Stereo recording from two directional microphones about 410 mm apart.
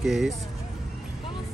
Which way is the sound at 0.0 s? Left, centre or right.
Centre.